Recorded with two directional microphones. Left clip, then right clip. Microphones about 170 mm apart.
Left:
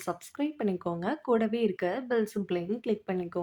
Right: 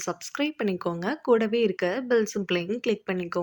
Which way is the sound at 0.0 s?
15° right (ahead or behind).